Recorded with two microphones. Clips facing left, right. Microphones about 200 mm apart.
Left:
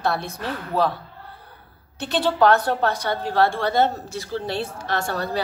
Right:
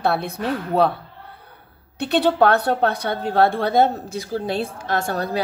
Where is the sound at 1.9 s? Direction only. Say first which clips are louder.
Right 4 dB; 60° right (ahead or behind).